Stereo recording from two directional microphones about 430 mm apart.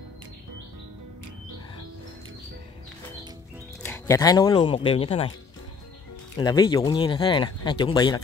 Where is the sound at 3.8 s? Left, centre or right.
Centre.